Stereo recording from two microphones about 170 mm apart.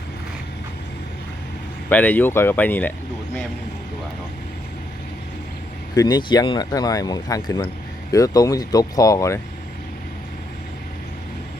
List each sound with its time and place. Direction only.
1.9 s speech: 10° left (ahead or behind)
5.9 s speech: 25° left (ahead or behind)